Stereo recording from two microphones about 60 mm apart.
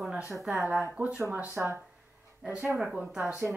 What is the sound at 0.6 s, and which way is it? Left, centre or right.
Speech, right.